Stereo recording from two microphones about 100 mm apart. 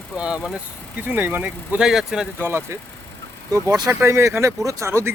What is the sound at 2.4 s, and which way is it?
Speech, 25° right (ahead or behind).